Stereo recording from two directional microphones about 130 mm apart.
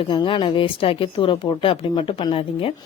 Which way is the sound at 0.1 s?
40° left (ahead or behind).